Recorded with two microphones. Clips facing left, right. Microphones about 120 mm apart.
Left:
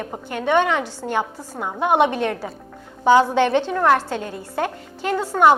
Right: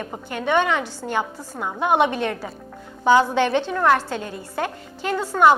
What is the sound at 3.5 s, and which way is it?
A woman's voice, 40° left (ahead or behind).